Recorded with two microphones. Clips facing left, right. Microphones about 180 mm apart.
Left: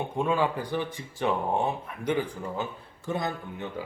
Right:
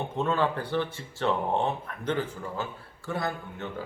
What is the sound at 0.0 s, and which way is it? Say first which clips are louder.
Speech: left 1 dB; 10° left (ahead or behind).